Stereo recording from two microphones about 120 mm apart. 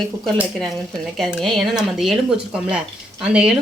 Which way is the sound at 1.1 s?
Centre (ahead or behind).